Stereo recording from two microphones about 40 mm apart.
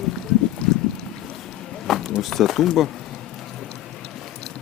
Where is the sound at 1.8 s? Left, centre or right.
Centre.